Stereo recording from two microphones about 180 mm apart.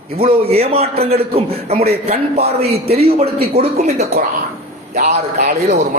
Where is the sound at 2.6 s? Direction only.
60° right (ahead or behind).